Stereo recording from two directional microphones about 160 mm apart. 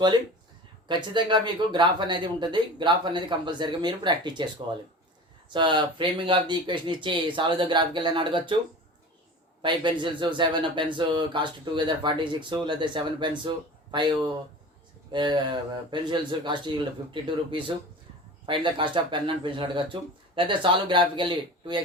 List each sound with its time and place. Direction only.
0.9 s speech: 30° right (ahead or behind)
9.6 s speech: 30° right (ahead or behind)
15.1 s speech: 30° right (ahead or behind)